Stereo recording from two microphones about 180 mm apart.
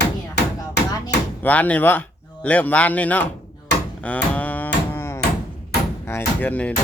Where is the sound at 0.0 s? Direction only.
70° left (ahead or behind).